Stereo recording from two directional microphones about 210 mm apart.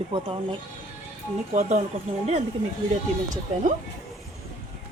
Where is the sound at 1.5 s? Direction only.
35° right (ahead or behind).